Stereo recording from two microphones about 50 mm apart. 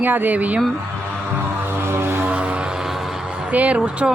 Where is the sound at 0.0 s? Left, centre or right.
Right.